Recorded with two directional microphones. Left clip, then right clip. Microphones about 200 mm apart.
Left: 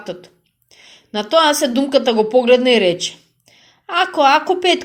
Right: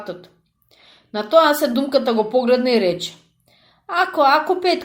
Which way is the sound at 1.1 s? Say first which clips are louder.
Even; 25° left (ahead or behind).